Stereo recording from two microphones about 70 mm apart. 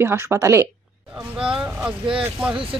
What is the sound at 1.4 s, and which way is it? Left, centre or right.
Speech, centre.